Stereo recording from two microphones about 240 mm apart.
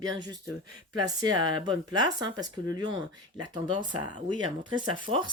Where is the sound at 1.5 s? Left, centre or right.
Centre.